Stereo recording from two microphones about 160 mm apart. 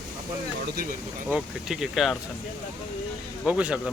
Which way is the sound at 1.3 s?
5° right (ahead or behind).